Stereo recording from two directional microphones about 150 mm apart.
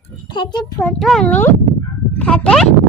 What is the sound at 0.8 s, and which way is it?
A child's voice, 5° left (ahead or behind).